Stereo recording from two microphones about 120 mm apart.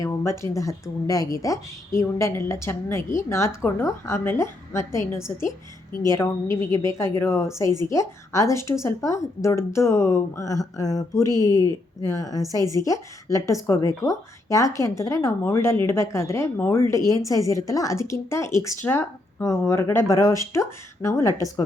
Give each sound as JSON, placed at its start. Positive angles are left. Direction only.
{"t": 0.0, "sound": "speech", "side_deg": 25}